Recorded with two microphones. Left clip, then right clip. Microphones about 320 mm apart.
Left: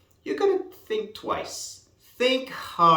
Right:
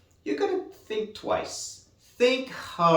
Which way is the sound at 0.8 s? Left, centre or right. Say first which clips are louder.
Left 1 dB; centre.